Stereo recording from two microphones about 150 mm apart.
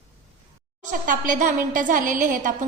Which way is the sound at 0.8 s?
60° right (ahead or behind).